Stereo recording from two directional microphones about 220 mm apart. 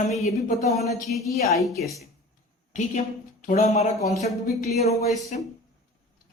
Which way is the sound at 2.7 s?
35° left (ahead or behind).